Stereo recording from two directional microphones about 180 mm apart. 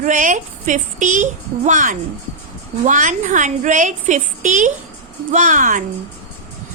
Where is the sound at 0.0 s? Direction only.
45° right (ahead or behind).